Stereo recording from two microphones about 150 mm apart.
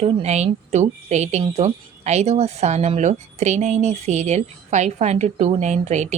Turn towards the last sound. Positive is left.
turn(degrees=-50)  # may be behind; listen again after turning